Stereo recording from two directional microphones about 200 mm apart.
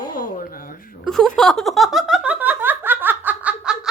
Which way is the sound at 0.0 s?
45° left (ahead or behind).